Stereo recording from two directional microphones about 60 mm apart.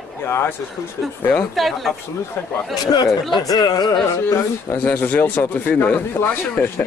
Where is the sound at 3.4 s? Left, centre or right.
Left.